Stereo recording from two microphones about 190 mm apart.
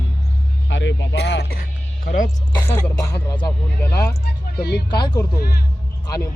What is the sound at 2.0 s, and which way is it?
Speech, 45° left (ahead or behind).